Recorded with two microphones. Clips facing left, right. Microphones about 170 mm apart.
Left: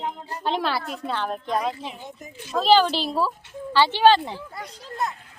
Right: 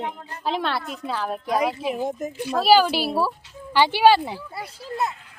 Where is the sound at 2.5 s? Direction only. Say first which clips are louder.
Right 1 dB; 10° right (ahead or behind).